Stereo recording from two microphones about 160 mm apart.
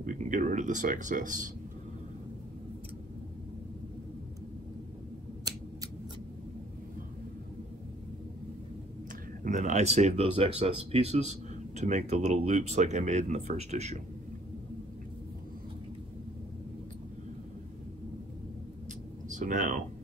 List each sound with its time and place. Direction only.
0.0 s speech: 55° right (ahead or behind)
9.4 s speech: 50° right (ahead or behind)
19.3 s speech: 55° right (ahead or behind)